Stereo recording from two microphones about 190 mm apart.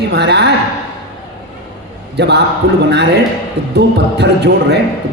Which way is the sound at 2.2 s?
60° right (ahead or behind).